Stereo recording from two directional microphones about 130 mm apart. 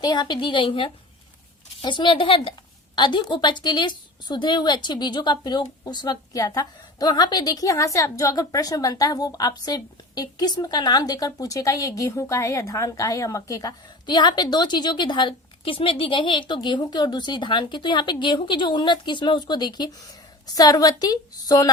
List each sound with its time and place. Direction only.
0.0 s a woman's voice: 30° left (ahead or behind)